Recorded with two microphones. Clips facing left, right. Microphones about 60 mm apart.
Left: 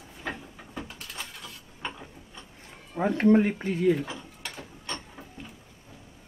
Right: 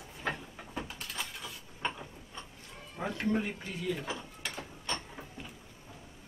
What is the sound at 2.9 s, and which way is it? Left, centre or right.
Speech, left.